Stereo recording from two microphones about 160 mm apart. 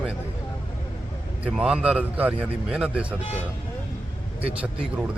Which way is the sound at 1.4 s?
5° right (ahead or behind).